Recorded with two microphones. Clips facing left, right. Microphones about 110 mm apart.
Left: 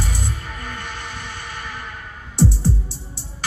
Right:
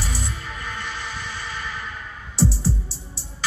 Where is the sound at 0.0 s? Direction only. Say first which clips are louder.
Left 3 dB; 50° left (ahead or behind).